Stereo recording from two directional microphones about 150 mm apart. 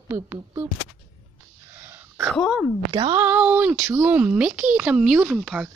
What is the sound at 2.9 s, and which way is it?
Speech, 30° right (ahead or behind).